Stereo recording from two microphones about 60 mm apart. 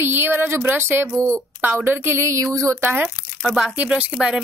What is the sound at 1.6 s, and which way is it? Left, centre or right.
A woman's voice, right.